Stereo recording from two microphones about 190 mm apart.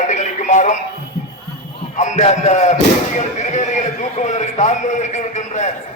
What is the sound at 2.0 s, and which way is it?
A man's voice, 35° left (ahead or behind).